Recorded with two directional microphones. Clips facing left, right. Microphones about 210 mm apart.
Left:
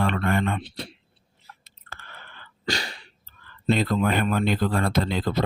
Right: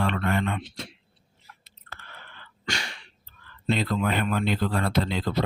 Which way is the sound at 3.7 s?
45° left (ahead or behind).